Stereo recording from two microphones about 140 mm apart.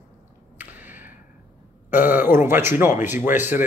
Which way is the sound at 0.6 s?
10° right (ahead or behind).